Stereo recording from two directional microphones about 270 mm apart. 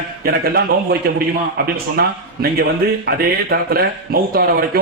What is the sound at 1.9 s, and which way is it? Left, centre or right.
A man's voice, right.